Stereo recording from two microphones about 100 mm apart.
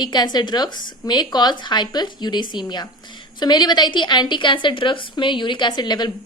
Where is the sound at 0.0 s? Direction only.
45° left (ahead or behind).